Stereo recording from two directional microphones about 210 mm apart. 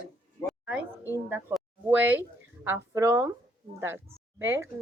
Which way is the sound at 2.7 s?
10° right (ahead or behind).